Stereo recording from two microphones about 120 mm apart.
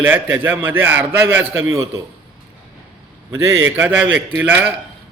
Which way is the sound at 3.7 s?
15° right (ahead or behind).